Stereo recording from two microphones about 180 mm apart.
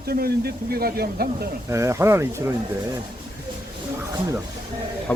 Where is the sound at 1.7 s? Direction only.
15° right (ahead or behind).